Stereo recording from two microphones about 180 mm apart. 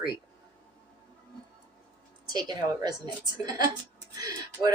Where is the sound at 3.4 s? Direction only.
20° right (ahead or behind).